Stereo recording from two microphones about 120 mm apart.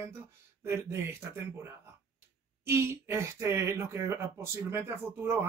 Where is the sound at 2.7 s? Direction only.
20° right (ahead or behind).